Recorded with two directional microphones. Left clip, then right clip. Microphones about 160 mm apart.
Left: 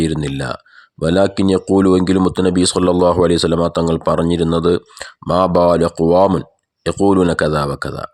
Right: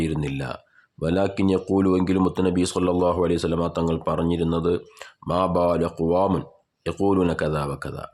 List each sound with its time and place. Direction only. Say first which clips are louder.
0.0 s speech: left 8 dB; 40° left (ahead or behind)